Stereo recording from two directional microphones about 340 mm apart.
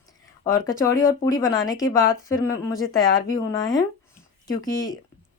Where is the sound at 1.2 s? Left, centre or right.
Centre.